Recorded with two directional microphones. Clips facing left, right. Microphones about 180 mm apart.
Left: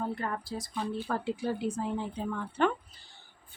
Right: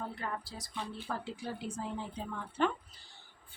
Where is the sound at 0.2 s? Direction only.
50° left (ahead or behind).